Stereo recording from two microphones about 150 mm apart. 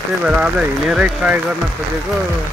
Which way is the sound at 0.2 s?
5° right (ahead or behind).